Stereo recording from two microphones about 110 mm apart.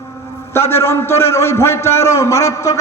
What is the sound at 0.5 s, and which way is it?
A man's voice, 25° left (ahead or behind).